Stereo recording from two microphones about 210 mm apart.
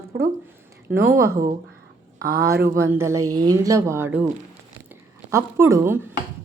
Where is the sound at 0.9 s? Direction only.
10° right (ahead or behind).